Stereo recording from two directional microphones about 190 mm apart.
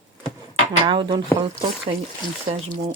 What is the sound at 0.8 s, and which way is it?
Speech, 25° right (ahead or behind).